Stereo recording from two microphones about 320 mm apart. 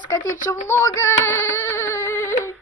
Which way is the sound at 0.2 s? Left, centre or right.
Left.